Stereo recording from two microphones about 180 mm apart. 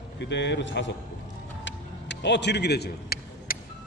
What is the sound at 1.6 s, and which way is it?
Vehicle, 75° left (ahead or behind).